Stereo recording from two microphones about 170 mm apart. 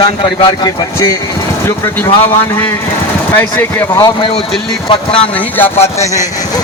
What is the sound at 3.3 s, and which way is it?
Speech, 10° left (ahead or behind).